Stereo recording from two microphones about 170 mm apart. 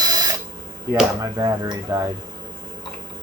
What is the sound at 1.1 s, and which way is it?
Speech, 20° right (ahead or behind).